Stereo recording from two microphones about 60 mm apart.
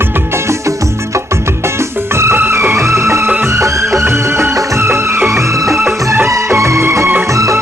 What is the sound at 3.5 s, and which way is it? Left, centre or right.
Music of bollywood, right.